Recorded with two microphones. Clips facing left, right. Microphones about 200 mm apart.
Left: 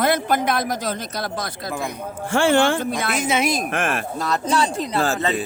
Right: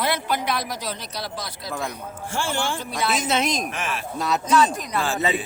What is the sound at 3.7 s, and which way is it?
Speech, 55° left (ahead or behind).